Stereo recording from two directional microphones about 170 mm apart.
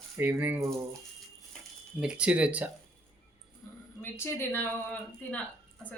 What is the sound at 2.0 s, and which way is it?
Speech, 5° right (ahead or behind).